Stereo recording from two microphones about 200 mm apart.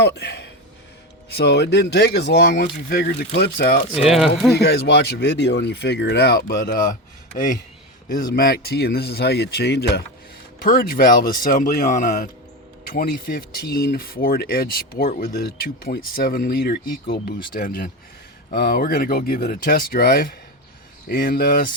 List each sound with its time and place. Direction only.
0.0 s speech: 55° left (ahead or behind)
4.0 s speech: centre (ahead or behind)
4.6 s speech: 55° left (ahead or behind)
8.0 s speech: 50° left (ahead or behind)